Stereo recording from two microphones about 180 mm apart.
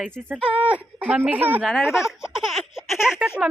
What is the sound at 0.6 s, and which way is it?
A woman's voice, 10° right (ahead or behind).